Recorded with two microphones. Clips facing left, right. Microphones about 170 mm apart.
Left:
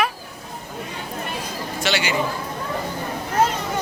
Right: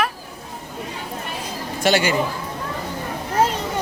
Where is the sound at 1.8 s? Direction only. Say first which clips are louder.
Right 6 dB; 50° right (ahead or behind).